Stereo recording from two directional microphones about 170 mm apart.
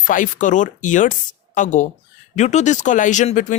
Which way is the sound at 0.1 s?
50° left (ahead or behind).